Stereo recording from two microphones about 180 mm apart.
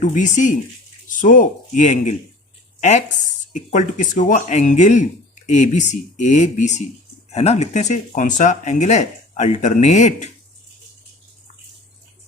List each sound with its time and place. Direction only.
0.0 s speech: 45° left (ahead or behind)